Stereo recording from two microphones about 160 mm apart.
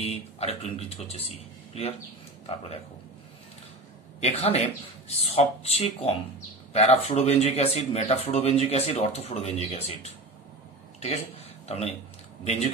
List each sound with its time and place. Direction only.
0.0 s speech: 40° left (ahead or behind)
4.2 s speech: 40° left (ahead or behind)